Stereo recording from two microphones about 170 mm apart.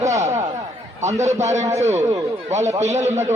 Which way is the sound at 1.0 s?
40° right (ahead or behind).